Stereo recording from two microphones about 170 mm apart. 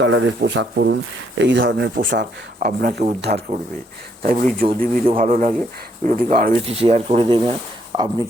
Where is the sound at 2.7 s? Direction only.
65° right (ahead or behind).